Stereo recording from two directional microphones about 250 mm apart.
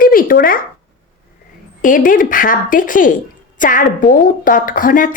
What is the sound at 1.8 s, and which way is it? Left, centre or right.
A woman's voice, left.